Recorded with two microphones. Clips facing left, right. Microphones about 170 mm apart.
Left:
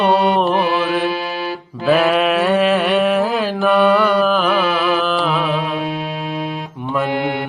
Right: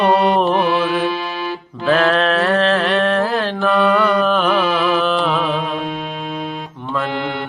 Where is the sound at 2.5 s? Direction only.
15° left (ahead or behind).